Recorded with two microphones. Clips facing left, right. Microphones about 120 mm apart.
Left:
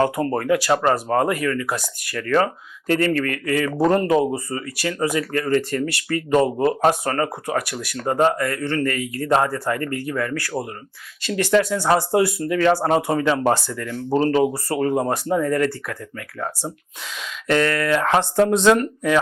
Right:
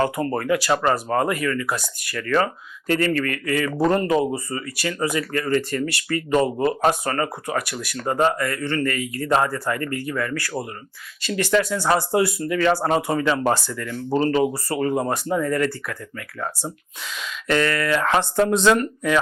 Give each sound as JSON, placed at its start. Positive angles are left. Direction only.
{"t": 0.0, "sound": "speech", "side_deg": 40}
{"t": 11.6, "sound": "speech", "side_deg": 35}
{"t": 12.1, "sound": "speech", "side_deg": 50}
{"t": 17.1, "sound": "speech", "side_deg": 50}